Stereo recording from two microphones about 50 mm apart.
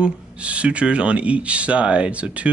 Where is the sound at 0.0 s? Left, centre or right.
Right.